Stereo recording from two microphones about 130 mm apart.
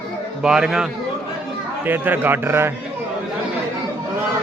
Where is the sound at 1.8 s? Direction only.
15° right (ahead or behind).